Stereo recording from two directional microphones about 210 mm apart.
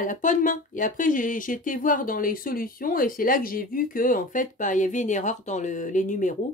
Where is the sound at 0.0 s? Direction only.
40° left (ahead or behind).